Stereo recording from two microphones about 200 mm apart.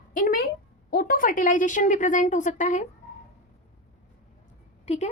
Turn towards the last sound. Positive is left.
turn(degrees=35)  # may be behind; listen again after turning